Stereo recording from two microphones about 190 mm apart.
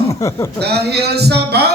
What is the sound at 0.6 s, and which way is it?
A man's voice, 60° right (ahead or behind).